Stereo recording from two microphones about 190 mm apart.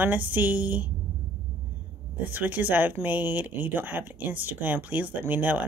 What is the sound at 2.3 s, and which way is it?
Speech, 10° right (ahead or behind).